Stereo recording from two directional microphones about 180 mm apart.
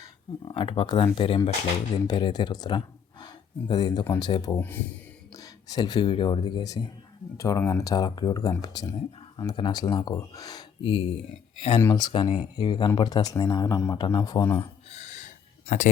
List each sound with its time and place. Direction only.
0.4 s speech: 30° left (ahead or behind)
4.5 s speech: 10° left (ahead or behind)
5.4 s speech: 20° left (ahead or behind)
11.8 s speech: 15° left (ahead or behind)
12.0 s speech: 25° left (ahead or behind)
14.8 s a sound: 40° left (ahead or behind)